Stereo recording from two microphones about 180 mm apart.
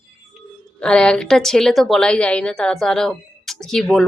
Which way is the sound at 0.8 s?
5° left (ahead or behind).